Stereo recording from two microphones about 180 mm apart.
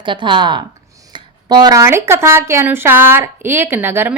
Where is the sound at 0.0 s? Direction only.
25° right (ahead or behind).